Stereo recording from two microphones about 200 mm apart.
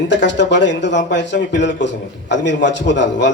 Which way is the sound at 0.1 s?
65° left (ahead or behind).